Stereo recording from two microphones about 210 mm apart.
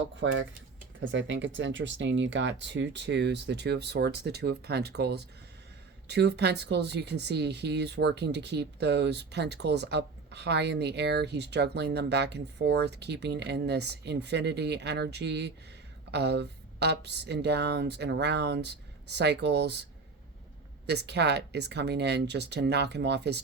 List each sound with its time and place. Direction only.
0.2 s speech: 60° right (ahead or behind)
20.8 s speech: 50° right (ahead or behind)